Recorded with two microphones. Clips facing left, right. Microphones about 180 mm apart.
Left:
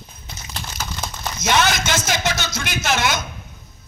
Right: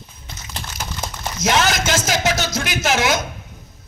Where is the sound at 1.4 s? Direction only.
40° right (ahead or behind).